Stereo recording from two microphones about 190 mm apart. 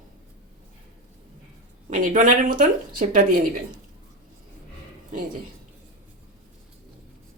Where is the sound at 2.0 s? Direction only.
40° right (ahead or behind).